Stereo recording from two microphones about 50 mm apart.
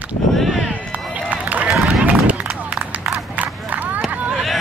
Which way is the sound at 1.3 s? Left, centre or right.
Right.